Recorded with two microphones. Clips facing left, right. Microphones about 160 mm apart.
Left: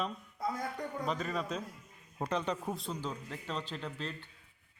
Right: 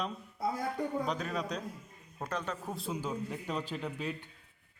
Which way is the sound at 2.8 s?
5° right (ahead or behind).